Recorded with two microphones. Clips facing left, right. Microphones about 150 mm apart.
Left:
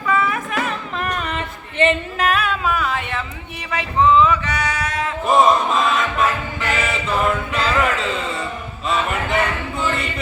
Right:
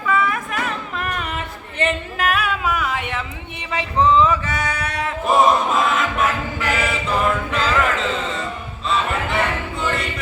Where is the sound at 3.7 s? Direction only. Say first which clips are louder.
Left 1 dB; 35° right (ahead or behind); by 4.9 s 55° right (ahead or behind).